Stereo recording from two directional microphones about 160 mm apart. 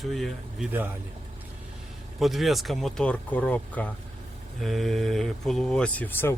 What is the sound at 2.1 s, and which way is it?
Speech, centre (ahead or behind).